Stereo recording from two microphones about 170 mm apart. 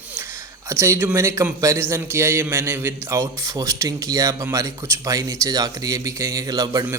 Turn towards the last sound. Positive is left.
turn(degrees=-20)  # may be behind; listen again after turning